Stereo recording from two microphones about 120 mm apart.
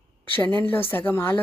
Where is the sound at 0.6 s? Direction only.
15° left (ahead or behind).